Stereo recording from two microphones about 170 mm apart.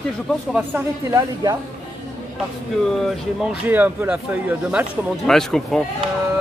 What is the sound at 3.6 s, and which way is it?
Speech, 10° right (ahead or behind).